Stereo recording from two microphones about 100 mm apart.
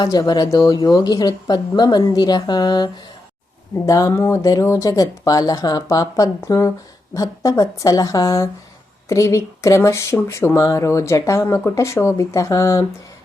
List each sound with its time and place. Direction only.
0.0 s speech: 40° left (ahead or behind)
3.8 s speech: 35° left (ahead or behind)